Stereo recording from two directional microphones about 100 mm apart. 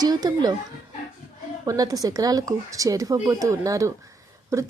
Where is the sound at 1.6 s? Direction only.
35° right (ahead or behind).